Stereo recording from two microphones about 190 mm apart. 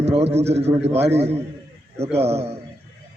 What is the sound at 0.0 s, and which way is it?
A man's voice, 35° right (ahead or behind).